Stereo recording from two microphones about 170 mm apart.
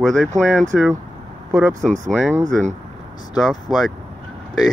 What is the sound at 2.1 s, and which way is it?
Speech, 10° right (ahead or behind).